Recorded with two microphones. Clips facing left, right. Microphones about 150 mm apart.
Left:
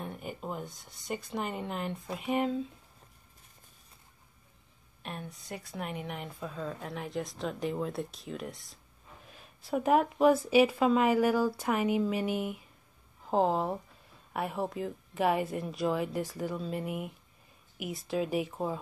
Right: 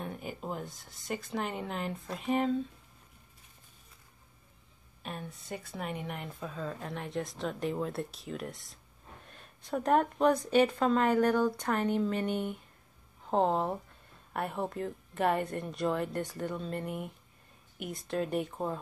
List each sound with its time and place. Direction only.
0.0 s speech: centre (ahead or behind)
5.0 s a woman's voice: centre (ahead or behind)